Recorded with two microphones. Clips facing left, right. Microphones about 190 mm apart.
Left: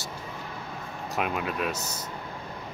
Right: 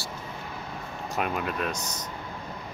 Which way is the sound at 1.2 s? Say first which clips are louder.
Even; centre (ahead or behind).